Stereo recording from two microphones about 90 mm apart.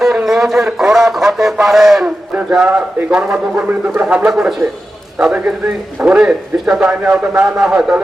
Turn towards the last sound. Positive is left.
turn(degrees=-10)  # may be behind; listen again after turning